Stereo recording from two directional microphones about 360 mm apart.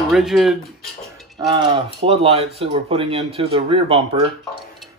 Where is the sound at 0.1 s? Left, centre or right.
Centre.